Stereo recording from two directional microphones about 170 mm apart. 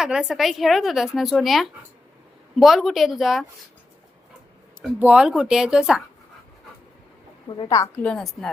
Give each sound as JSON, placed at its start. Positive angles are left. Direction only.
{"t": 0.0, "sound": "a woman's voice", "side_deg": -5}
{"t": 4.8, "sound": "a woman's voice", "side_deg": -5}
{"t": 7.6, "sound": "a woman's voice", "side_deg": 20}
{"t": 8.0, "sound": "a woman's voice", "side_deg": 5}